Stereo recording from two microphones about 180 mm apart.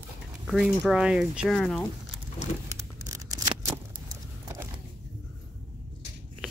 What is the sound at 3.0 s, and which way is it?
Scissors, 20° right (ahead or behind).